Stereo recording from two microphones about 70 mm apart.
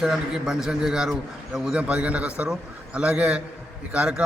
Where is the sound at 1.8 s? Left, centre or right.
Centre.